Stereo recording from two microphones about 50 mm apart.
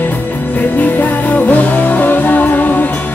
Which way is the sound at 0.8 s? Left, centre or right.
Left.